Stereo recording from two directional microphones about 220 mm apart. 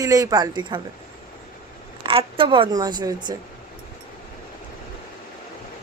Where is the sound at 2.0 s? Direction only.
25° right (ahead or behind).